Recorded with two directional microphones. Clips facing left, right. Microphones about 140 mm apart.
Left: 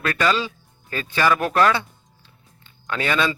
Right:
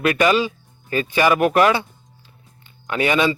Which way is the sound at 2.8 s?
15° right (ahead or behind).